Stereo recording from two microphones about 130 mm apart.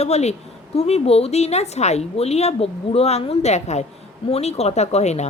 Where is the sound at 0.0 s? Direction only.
55° left (ahead or behind).